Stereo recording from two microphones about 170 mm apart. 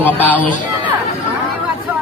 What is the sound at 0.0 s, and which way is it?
Speech, 10° left (ahead or behind).